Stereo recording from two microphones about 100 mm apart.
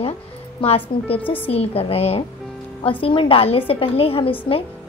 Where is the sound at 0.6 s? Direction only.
65° left (ahead or behind); by 2.2 s 85° left.